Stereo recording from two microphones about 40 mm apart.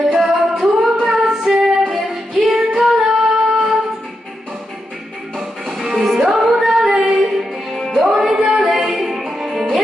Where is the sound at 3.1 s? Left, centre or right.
Centre.